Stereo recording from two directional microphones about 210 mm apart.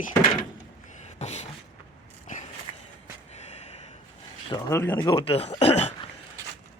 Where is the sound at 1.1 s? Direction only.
30° left (ahead or behind).